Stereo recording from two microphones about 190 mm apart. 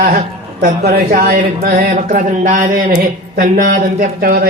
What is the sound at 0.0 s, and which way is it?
Speech, 50° right (ahead or behind).